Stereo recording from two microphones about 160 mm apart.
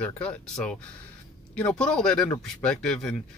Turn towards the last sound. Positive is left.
turn(degrees=5)  # may be behind; listen again after turning